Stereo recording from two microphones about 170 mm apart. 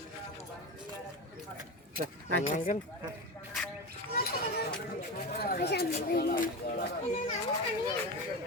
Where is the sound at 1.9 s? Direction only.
60° right (ahead or behind).